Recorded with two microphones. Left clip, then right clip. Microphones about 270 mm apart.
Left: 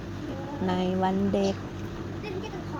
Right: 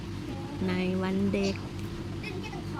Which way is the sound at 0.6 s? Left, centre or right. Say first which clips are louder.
Left 5 dB; centre.